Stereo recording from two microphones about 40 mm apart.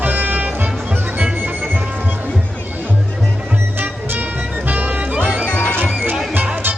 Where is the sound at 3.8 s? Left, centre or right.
Right.